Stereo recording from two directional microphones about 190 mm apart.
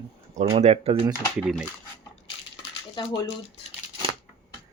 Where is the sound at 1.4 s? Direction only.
5° right (ahead or behind).